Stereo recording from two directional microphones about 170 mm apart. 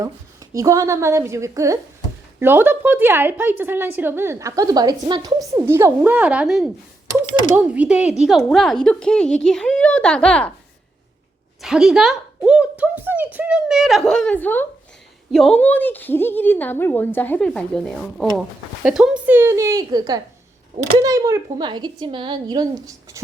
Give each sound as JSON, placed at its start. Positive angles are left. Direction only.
{"t": 0.5, "sound": "a woman's voice", "side_deg": -20}
{"t": 11.6, "sound": "a woman's voice", "side_deg": -5}